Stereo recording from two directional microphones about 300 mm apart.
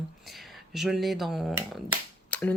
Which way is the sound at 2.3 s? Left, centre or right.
Centre.